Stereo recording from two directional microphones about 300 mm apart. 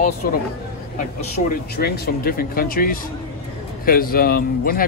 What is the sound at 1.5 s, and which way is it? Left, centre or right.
Speech, left.